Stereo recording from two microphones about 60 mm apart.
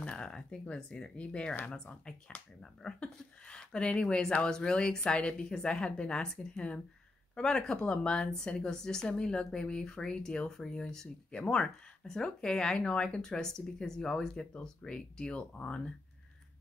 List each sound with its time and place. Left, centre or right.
0.0 s speech: centre